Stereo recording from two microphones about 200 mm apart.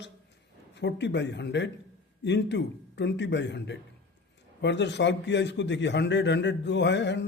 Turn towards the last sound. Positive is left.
turn(degrees=60)  # may be behind; listen again after turning